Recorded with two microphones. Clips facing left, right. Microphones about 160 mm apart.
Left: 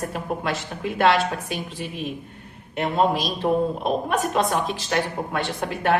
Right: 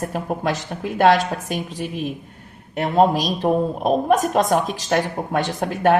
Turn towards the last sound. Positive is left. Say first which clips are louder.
# right 5 dB
turn(degrees=-45)  # may be behind; listen again after turning